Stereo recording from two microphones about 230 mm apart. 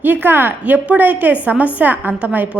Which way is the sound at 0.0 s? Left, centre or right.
Centre.